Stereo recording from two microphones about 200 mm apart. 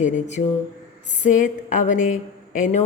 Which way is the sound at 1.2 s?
40° left (ahead or behind).